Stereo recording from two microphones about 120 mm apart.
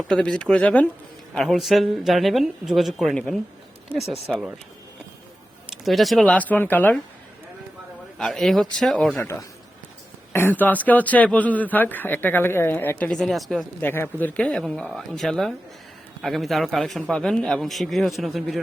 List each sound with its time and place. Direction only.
0.1 s speech: 5° left (ahead or behind)
3.9 s speech: 15° right (ahead or behind)
4.3 s speech: centre (ahead or behind)
5.7 s speech: centre (ahead or behind); by 6.9 s 15° left (ahead or behind)
8.2 s speech: 5° left (ahead or behind)
9.2 s a man's voice: 20° left (ahead or behind); by 13.7 s centre (ahead or behind)
13.8 s speech: 15° left (ahead or behind); by 18.6 s centre (ahead or behind)